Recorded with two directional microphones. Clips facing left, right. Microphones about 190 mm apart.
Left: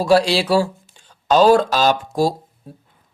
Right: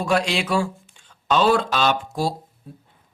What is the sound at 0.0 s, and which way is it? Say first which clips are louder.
Speech: left 6 dB; 35° left (ahead or behind).